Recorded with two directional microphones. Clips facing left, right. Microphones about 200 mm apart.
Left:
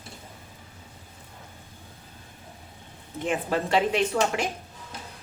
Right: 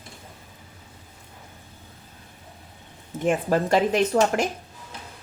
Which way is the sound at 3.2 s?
45° right (ahead or behind).